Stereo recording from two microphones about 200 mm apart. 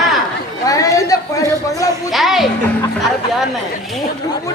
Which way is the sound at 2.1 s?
Centre (ahead or behind).